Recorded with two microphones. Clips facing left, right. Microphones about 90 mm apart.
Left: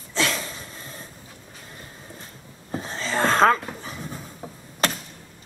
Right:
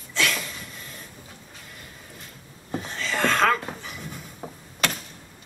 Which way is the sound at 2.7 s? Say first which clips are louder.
Left 2 dB; 30° left (ahead or behind).